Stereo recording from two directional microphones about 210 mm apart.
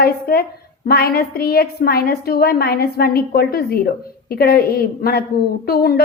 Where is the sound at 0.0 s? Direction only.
50° left (ahead or behind).